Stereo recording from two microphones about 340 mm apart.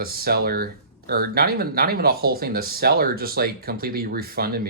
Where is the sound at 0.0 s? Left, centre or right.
Right.